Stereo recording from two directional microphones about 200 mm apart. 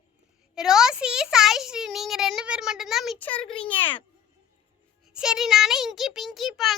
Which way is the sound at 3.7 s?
25° left (ahead or behind).